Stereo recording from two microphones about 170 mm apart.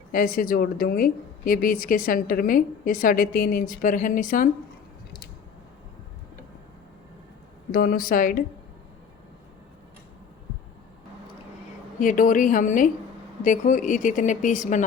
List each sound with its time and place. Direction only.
0.1 s a woman's voice: 55° left (ahead or behind)
7.7 s a woman's voice: 60° left (ahead or behind)
11.9 s a woman's voice: 50° left (ahead or behind)